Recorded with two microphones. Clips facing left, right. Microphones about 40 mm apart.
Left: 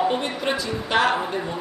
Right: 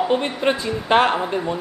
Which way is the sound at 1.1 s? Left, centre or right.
Centre.